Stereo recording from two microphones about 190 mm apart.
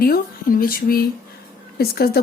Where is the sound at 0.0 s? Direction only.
50° left (ahead or behind).